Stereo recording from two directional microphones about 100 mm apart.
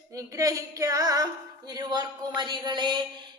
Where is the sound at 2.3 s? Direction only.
50° right (ahead or behind).